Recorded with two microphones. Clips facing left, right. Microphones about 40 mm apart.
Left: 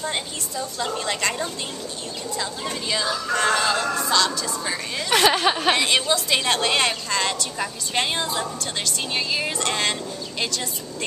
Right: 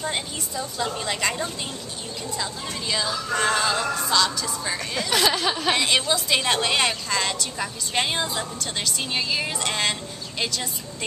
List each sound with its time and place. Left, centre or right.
0.0 s a woman's voice: centre
2.9 s a woman's voice: centre
5.1 s speech: left
5.7 s a woman's voice: centre